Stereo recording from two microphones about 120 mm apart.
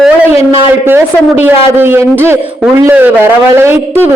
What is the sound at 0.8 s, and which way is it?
A man's voice, 20° right (ahead or behind).